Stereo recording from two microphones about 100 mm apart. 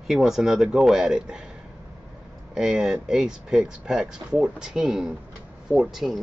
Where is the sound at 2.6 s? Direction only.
5° right (ahead or behind).